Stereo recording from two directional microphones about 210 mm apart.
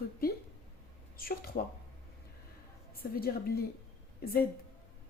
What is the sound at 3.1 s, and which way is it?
Speech, 45° left (ahead or behind).